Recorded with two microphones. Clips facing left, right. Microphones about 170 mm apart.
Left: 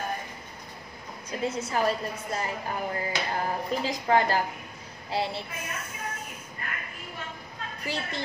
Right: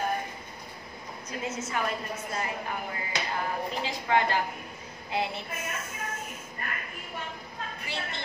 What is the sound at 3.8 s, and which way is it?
A woman's voice, 35° left (ahead or behind).